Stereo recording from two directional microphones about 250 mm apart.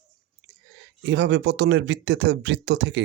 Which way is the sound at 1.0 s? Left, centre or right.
Right.